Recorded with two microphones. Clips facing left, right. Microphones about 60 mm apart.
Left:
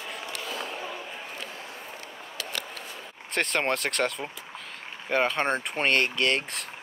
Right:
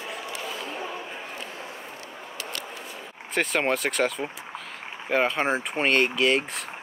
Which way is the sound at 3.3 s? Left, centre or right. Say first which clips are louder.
Right 2 dB; centre.